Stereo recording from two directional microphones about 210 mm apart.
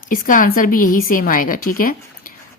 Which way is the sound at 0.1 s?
40° left (ahead or behind).